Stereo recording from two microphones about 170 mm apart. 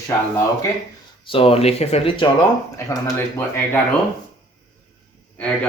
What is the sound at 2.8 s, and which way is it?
Speech, 15° left (ahead or behind).